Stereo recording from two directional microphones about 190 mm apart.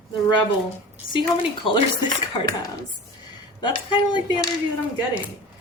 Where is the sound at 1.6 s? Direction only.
25° left (ahead or behind).